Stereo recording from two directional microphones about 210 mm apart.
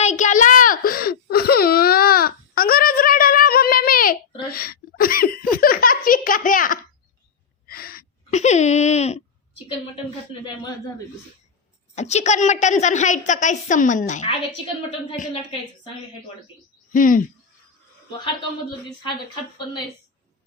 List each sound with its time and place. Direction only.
0.0 s whimper: 35° left (ahead or behind)
4.5 s a sound: 45° left (ahead or behind)
7.7 s gasp: 45° left (ahead or behind)
8.3 s a sound: 35° left (ahead or behind)
11.9 s a woman's voice: 30° left (ahead or behind)
16.9 s a woman's voice: 40° left (ahead or behind)